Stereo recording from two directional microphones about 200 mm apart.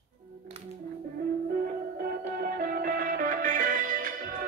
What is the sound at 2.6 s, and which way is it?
Music, 45° right (ahead or behind).